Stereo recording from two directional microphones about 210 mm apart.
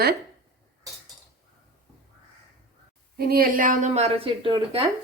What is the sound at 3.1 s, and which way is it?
A woman's voice, 45° right (ahead or behind).